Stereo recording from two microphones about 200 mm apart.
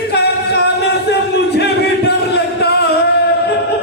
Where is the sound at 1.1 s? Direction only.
55° left (ahead or behind).